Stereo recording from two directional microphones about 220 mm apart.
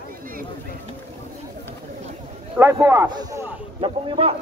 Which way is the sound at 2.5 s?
10° right (ahead or behind).